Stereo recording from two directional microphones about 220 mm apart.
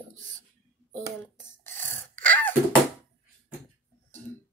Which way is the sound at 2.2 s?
5° left (ahead or behind).